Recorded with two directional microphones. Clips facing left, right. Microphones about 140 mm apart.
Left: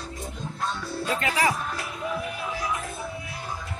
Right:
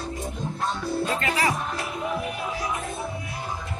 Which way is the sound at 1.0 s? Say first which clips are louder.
Left 3 dB; 10° left (ahead or behind).